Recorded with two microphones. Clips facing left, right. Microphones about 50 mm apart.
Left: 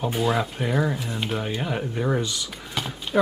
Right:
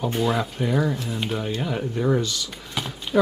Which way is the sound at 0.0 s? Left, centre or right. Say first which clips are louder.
Even; centre.